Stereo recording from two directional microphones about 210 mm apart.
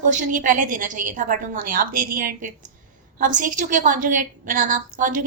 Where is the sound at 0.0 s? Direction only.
40° right (ahead or behind).